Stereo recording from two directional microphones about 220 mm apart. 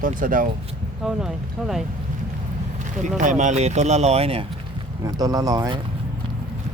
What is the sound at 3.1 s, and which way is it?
Speech, 35° right (ahead or behind).